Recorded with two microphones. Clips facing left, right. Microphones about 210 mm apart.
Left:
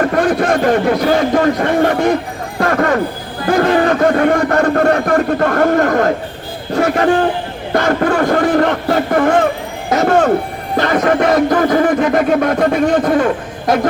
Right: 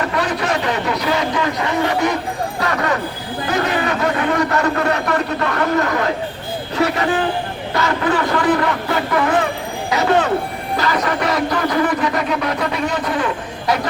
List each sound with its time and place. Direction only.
0.0 s speech: 50° left (ahead or behind)
2.6 s a sound: 50° left (ahead or behind)
3.5 s speech: 50° left (ahead or behind)